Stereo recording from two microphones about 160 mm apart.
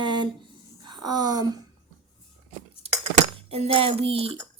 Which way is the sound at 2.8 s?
40° right (ahead or behind).